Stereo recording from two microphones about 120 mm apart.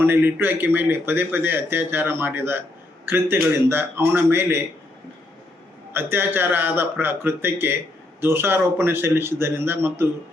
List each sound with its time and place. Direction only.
0.0 s speech: 20° right (ahead or behind)
5.9 s speech: 20° right (ahead or behind)